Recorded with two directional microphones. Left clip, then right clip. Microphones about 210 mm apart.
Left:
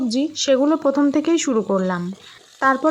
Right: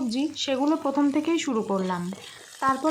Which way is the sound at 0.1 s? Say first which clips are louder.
Left 11 dB; 25° left (ahead or behind).